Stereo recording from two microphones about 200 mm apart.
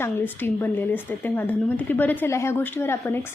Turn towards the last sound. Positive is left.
turn(degrees=10)  # may be behind; listen again after turning